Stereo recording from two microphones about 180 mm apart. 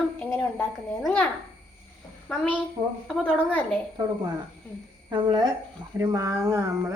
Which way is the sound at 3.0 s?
5° left (ahead or behind).